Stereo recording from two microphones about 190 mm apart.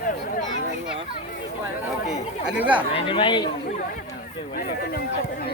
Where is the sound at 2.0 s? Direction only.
5° right (ahead or behind).